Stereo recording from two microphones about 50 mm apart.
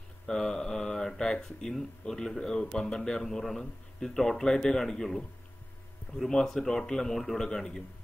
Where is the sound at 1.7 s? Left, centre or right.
Centre.